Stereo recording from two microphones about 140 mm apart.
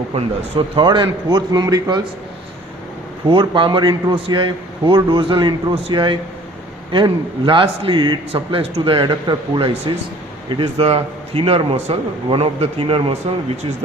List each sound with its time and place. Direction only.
0.1 s a man's voice: 45° right (ahead or behind); by 2.0 s 30° right (ahead or behind)
3.2 s a man's voice: 35° right (ahead or behind)